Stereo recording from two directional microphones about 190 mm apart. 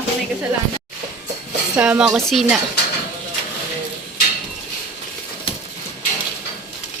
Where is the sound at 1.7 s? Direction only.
5° right (ahead or behind).